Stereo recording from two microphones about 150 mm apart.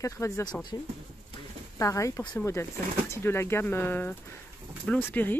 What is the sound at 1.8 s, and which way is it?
Speech, 20° left (ahead or behind).